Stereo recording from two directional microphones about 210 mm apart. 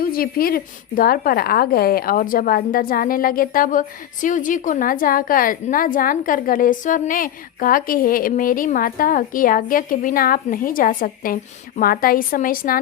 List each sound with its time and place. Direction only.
0.0 s a woman's voice: 45° left (ahead or behind)